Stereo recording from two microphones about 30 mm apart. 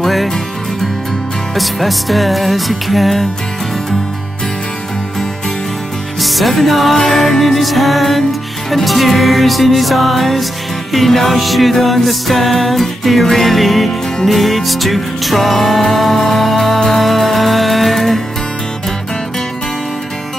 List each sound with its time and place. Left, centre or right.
0.0 s music: centre
1.5 s music: centre
6.1 s music: centre